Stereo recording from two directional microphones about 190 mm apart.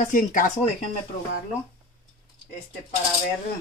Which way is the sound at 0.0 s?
45° left (ahead or behind).